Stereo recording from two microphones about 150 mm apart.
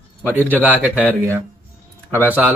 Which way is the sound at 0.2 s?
10° left (ahead or behind).